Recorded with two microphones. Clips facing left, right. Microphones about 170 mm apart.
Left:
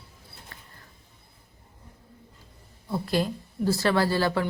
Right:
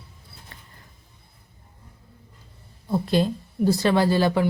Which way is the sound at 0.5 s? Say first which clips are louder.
Right 1 dB; 25° right (ahead or behind).